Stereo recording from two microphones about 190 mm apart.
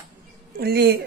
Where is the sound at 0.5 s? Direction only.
55° right (ahead or behind).